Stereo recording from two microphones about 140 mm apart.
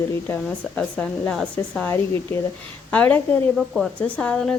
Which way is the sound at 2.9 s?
10° left (ahead or behind).